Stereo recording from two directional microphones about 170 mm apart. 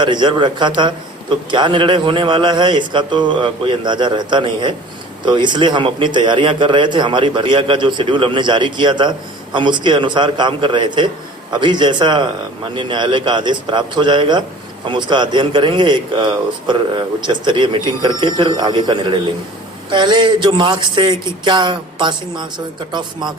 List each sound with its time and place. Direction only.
0.0 s a man's voice: 25° right (ahead or behind)